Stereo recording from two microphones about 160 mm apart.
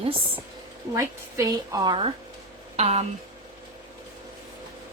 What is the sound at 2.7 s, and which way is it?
Speech, 45° right (ahead or behind).